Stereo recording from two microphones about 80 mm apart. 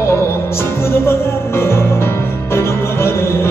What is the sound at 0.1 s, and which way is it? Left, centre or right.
Music, left.